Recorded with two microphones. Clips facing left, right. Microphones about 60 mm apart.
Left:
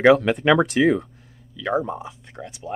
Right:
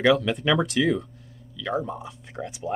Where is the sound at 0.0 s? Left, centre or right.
Left.